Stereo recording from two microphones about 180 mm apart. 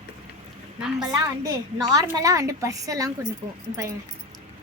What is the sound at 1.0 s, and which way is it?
A woman's voice, 20° right (ahead or behind).